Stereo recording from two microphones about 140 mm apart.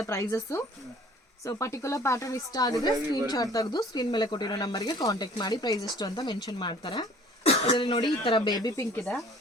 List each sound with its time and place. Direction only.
0.0 s speech: 20° left (ahead or behind)
7.4 s throat clearing: 50° left (ahead or behind)
7.8 s speech: 30° left (ahead or behind)
8.2 s speech: 45° left (ahead or behind)
8.4 s speech: 30° left (ahead or behind)